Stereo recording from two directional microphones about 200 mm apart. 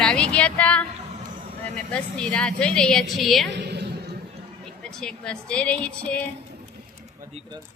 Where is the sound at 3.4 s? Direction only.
55° right (ahead or behind).